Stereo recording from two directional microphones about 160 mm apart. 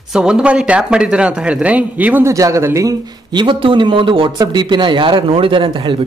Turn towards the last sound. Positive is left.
turn(degrees=-30)  # may be behind; listen again after turning